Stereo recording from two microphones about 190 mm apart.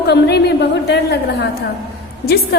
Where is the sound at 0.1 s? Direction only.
60° left (ahead or behind).